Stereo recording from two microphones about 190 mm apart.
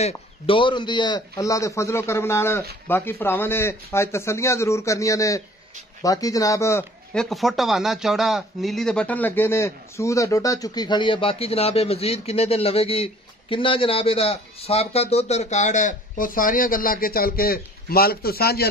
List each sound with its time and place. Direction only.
0.0 s a man's voice: 25° left (ahead or behind)
7.2 s speech: centre (ahead or behind); by 18.7 s 55° left (ahead or behind)